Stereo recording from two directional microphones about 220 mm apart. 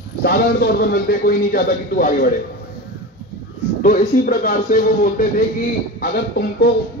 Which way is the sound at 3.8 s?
40° left (ahead or behind).